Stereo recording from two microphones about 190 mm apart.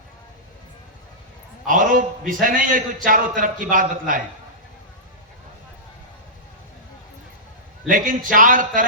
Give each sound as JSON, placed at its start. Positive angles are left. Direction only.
{"t": 1.6, "sound": "a man's voice", "side_deg": -45}
{"t": 7.9, "sound": "a man's voice", "side_deg": -45}